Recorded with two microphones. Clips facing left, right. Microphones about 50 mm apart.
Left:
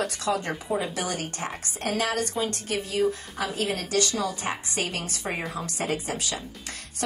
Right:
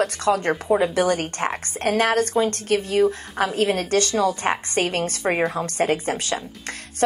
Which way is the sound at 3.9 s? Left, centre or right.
Right.